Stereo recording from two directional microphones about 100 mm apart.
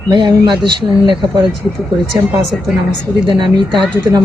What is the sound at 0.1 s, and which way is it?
Speech, 50° right (ahead or behind).